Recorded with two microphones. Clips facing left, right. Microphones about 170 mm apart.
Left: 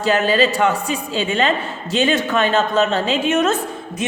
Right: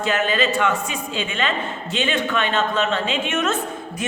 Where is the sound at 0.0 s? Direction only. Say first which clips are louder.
Left 5 dB; 35° left (ahead or behind).